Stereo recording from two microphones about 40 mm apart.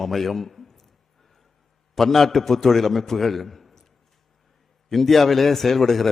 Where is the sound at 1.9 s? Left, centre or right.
Centre.